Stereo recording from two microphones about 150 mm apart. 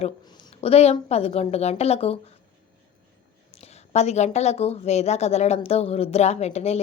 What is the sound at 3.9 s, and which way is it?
A woman's voice, 45° left (ahead or behind).